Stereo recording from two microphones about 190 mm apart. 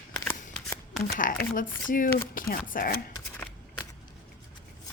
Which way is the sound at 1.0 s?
45° left (ahead or behind).